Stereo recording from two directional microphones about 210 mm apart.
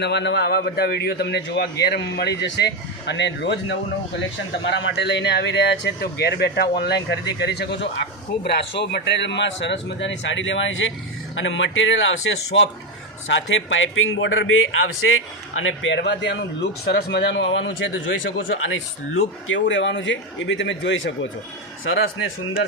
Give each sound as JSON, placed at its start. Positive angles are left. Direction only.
{"t": 0.0, "sound": "a man's voice", "side_deg": 55}